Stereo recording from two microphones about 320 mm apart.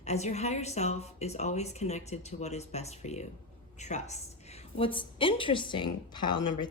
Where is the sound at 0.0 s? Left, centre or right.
Left.